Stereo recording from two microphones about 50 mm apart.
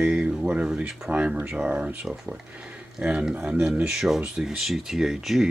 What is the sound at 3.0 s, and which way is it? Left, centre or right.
Speech, centre.